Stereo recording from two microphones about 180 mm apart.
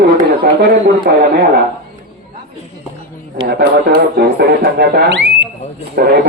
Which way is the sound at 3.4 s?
60° right (ahead or behind).